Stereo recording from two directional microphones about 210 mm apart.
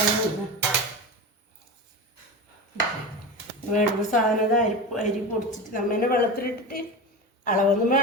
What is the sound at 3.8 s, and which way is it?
Speech, 35° left (ahead or behind).